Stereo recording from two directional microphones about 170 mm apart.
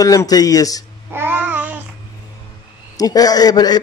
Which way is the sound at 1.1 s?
10° right (ahead or behind).